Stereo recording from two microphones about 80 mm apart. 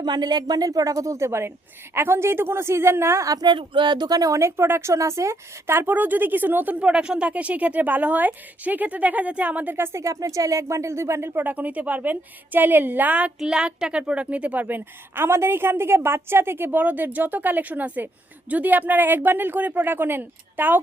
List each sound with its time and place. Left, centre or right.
0.0 s a woman's voice: right
3.4 s speech: right
11.3 s speech: right